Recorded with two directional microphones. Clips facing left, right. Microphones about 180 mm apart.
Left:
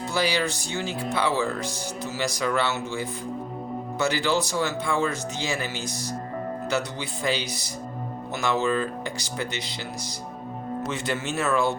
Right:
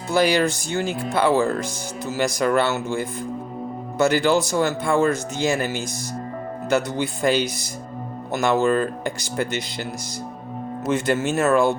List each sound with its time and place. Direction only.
0.1 s speech: 50° right (ahead or behind)
10.8 s speech: 50° right (ahead or behind)